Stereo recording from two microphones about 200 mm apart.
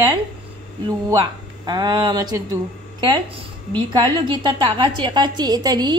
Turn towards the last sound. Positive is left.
turn(degrees=-20)  # may be behind; listen again after turning